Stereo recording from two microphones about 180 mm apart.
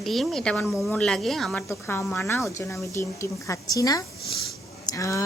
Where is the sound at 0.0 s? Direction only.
Centre (ahead or behind).